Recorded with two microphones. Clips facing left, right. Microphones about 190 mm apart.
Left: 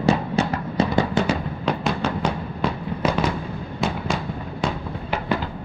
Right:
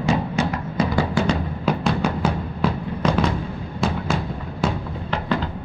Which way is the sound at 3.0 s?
5° left (ahead or behind).